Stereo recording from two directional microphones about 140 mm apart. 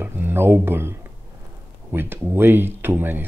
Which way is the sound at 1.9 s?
15° right (ahead or behind).